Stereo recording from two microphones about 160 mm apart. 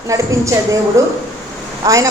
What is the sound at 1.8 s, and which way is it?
Speech, 20° right (ahead or behind).